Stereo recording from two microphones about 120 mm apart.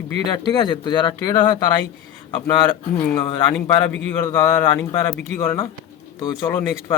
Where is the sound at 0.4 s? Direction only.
35° left (ahead or behind).